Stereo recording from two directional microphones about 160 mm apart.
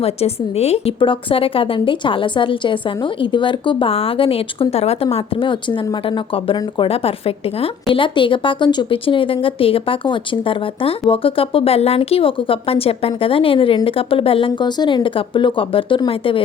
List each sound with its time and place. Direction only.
0.0 s speech: 40° left (ahead or behind)